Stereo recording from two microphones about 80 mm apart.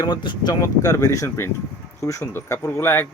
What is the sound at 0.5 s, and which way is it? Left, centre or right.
Speech, left.